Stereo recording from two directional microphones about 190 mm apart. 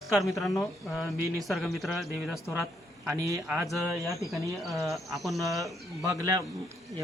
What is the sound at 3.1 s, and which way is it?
Speech, 15° right (ahead or behind).